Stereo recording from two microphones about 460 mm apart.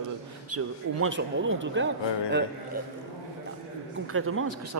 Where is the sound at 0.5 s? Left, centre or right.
Right.